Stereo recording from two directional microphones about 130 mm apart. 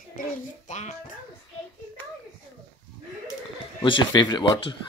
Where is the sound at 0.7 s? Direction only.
70° left (ahead or behind).